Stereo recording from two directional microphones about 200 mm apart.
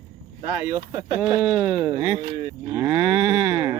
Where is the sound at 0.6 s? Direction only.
15° right (ahead or behind).